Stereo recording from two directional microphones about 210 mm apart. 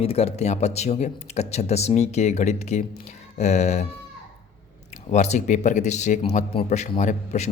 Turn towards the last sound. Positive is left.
turn(degrees=35)  # may be behind; listen again after turning